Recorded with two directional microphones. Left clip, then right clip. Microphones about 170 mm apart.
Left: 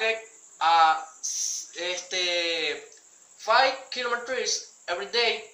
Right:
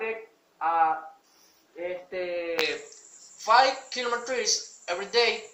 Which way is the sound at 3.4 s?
25° right (ahead or behind).